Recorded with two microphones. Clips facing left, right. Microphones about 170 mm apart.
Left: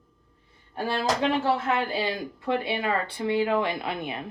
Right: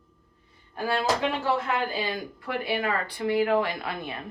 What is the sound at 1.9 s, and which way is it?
Speech, 25° left (ahead or behind).